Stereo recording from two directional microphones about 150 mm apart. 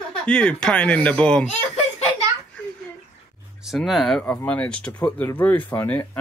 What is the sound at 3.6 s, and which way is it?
Speech, centre (ahead or behind).